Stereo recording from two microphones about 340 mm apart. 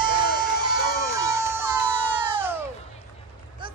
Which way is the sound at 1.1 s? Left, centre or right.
Centre.